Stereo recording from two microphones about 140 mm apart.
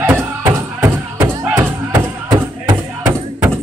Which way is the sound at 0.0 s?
15° right (ahead or behind).